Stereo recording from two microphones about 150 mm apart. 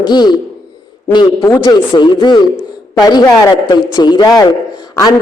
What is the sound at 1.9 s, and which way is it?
A man's voice, 30° left (ahead or behind).